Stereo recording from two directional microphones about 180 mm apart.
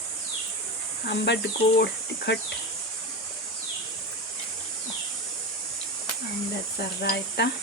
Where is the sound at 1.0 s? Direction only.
70° left (ahead or behind).